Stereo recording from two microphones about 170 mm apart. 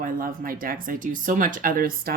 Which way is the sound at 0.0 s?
55° right (ahead or behind).